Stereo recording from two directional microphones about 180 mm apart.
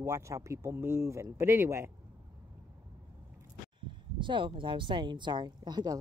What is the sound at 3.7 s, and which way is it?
Speech, 25° right (ahead or behind).